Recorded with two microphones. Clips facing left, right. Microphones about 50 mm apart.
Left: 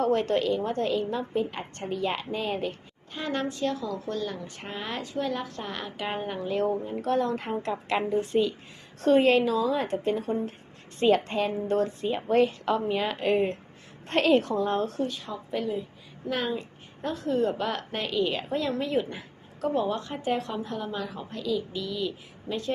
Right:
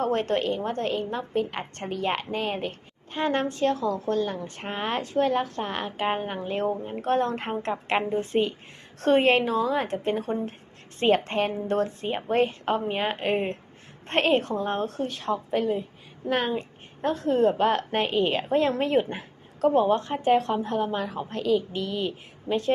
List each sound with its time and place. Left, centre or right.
0.0 s a woman's voice: right
3.1 s a woman's voice: right
9.0 s a woman's voice: right